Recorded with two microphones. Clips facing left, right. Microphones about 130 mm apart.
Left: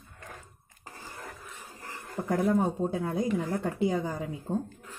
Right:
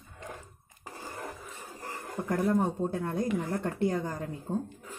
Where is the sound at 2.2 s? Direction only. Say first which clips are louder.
Left 1 dB; 15° left (ahead or behind).